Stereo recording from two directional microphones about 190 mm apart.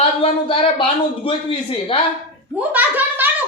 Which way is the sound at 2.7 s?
10° right (ahead or behind).